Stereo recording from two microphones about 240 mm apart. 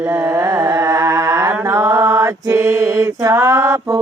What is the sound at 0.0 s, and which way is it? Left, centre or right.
Mantra, centre.